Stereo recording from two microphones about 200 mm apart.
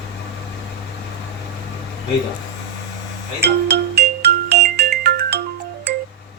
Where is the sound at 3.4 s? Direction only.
55° right (ahead or behind).